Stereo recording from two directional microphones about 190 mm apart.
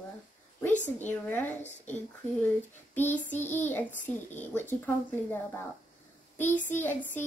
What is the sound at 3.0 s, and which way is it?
A child's voice, 10° left (ahead or behind).